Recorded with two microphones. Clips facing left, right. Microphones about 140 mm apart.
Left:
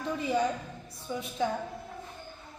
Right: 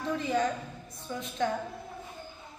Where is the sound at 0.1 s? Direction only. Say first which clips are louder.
Even; 5° left (ahead or behind).